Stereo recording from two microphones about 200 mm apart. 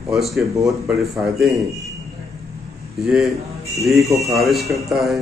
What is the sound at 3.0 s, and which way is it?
A man's voice, centre (ahead or behind).